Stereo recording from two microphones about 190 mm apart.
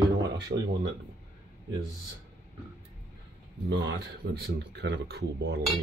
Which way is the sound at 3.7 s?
65° right (ahead or behind).